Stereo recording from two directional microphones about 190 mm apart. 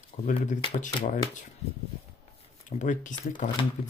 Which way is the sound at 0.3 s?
40° left (ahead or behind).